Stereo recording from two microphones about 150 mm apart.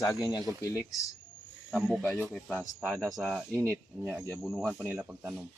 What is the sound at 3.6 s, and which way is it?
Speech, 20° right (ahead or behind).